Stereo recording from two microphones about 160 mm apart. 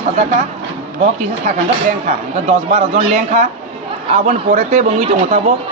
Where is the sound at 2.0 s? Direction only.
45° right (ahead or behind).